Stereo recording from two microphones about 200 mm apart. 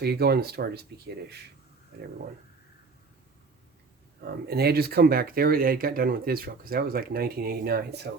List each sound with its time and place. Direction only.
0.0 s speech: 55° right (ahead or behind)
4.2 s speech: 55° right (ahead or behind)